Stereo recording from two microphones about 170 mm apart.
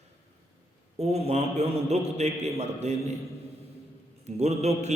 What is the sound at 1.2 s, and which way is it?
A man's voice, 40° right (ahead or behind).